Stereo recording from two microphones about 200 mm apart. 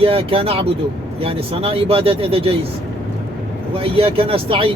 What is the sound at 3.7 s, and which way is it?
Speech, 30° right (ahead or behind).